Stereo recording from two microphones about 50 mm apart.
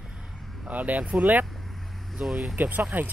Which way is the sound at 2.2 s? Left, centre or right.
Centre.